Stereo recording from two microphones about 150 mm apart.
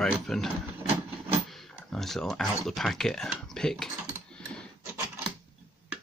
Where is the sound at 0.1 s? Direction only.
5° left (ahead or behind).